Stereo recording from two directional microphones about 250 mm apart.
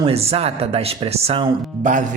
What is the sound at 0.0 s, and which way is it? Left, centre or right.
A man's voice, right.